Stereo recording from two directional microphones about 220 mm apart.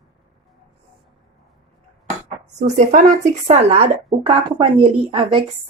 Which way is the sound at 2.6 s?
30° right (ahead or behind).